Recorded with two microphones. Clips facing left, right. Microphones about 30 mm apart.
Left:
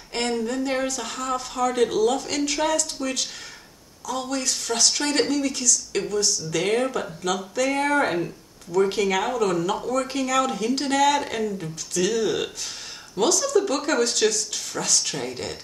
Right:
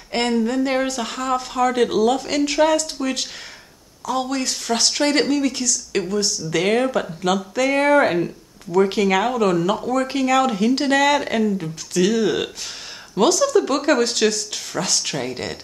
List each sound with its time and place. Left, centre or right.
0.4 s speech: right
2.0 s speech: right
5.3 s speech: right
6.6 s speech: right
7.3 s speech: right
7.6 s speech: right